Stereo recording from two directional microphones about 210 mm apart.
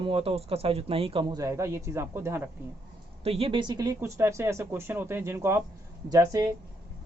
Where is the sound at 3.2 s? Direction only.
25° right (ahead or behind).